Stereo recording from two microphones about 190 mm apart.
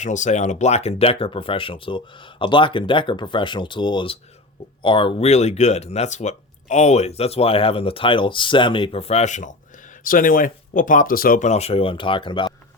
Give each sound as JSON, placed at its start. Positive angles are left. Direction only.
{"t": 0.0, "sound": "speech", "side_deg": 40}